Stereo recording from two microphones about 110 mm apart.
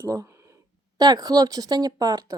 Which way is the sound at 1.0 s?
40° right (ahead or behind).